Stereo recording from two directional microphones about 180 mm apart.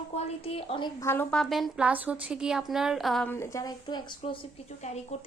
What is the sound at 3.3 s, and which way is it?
A woman's voice, 15° left (ahead or behind).